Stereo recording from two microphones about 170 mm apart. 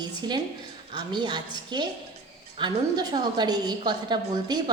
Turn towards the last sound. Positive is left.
turn(degrees=-25)  # may be behind; listen again after turning